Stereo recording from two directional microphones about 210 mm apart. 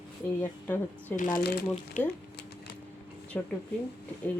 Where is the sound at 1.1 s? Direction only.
40° left (ahead or behind).